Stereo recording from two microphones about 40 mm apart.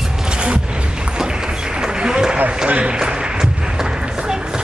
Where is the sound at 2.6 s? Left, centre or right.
Right.